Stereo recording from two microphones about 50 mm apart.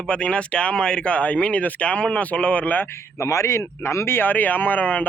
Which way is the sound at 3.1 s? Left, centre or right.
Left.